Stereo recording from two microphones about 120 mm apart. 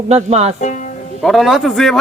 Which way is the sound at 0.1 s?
65° right (ahead or behind).